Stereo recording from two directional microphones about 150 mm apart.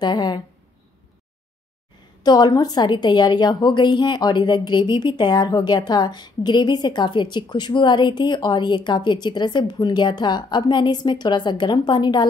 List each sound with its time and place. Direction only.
0.0 s a woman's voice: 30° left (ahead or behind)
2.2 s a woman's voice: 25° left (ahead or behind)